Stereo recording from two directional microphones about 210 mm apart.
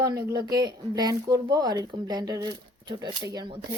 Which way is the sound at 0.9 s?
20° right (ahead or behind).